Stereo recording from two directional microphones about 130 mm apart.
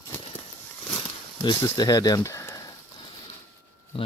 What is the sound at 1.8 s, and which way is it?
Speech, 30° left (ahead or behind).